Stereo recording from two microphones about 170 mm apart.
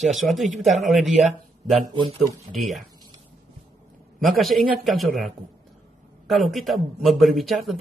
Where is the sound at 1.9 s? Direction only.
30° right (ahead or behind).